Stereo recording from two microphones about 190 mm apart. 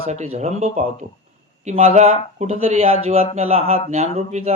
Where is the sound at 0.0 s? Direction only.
35° right (ahead or behind).